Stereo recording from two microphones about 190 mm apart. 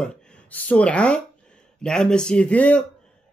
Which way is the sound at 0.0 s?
5° left (ahead or behind).